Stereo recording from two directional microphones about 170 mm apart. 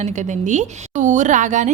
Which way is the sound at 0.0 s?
45° right (ahead or behind).